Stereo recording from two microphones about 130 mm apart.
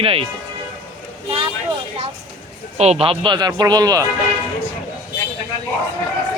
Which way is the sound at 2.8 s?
50° right (ahead or behind).